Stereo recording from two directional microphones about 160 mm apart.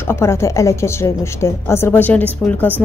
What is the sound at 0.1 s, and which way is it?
A woman's voice, 15° left (ahead or behind).